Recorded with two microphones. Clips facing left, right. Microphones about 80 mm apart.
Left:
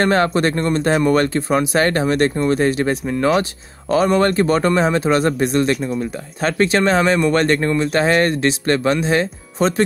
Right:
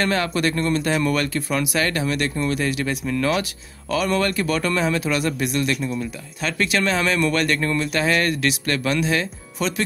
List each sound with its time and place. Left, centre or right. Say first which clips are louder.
0.0 s speech: left 6 dB; left